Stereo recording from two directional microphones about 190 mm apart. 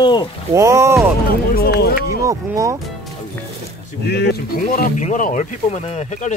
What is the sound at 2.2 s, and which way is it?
Speech, 15° right (ahead or behind).